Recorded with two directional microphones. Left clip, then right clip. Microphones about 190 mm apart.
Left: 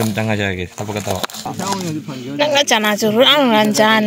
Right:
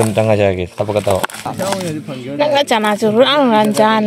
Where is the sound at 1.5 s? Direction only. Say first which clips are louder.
Right 3 dB; 50° right (ahead or behind).